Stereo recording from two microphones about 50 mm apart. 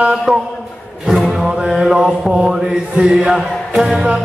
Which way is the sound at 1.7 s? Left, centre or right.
Centre.